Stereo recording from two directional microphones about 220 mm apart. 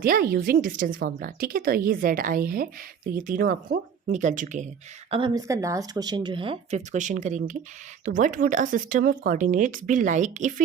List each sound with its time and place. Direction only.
0.0 s a woman's voice: 40° right (ahead or behind)
5.1 s a woman's voice: 20° right (ahead or behind); by 10.5 s 35° right (ahead or behind)